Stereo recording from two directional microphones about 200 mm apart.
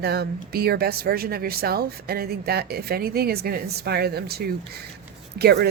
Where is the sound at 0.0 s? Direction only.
50° right (ahead or behind).